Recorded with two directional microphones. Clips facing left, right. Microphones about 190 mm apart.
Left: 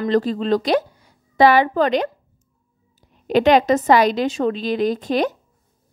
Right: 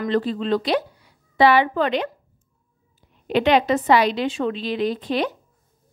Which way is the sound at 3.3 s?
45° left (ahead or behind).